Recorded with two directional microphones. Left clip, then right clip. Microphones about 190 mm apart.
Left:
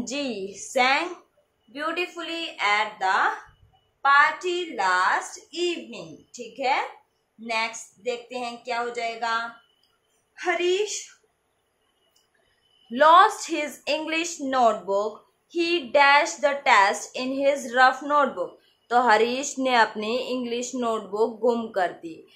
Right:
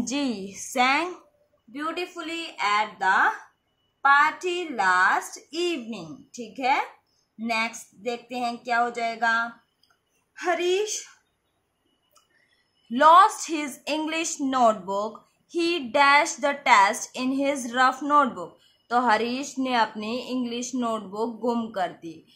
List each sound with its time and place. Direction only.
0.0 s a woman's voice: 30° right (ahead or behind)
12.9 s a woman's voice: 30° right (ahead or behind)